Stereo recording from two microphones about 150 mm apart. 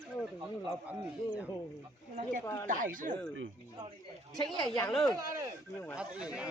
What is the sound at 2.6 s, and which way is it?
Speech, 60° right (ahead or behind).